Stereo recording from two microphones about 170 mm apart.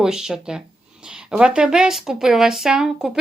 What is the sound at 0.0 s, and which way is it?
Speech, 5° right (ahead or behind).